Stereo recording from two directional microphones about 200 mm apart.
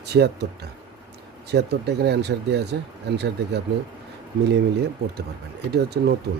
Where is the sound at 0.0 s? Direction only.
55° right (ahead or behind).